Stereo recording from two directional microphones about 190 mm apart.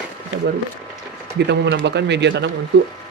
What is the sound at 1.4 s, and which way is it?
A man's voice, 65° right (ahead or behind).